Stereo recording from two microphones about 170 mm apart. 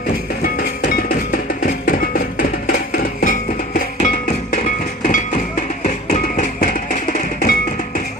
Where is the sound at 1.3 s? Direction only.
55° left (ahead or behind).